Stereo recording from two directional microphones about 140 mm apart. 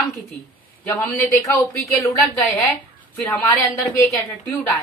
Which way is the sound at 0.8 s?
15° left (ahead or behind).